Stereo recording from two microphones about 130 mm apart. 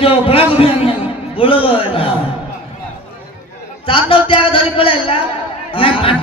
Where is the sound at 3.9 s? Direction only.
45° left (ahead or behind).